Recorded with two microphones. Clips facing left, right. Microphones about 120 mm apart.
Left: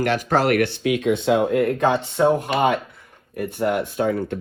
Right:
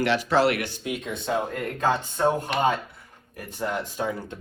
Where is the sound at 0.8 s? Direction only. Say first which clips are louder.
Left 11 dB; 90° left.